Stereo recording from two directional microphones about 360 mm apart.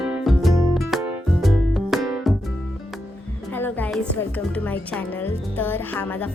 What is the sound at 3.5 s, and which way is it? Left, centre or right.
A woman's voice, centre.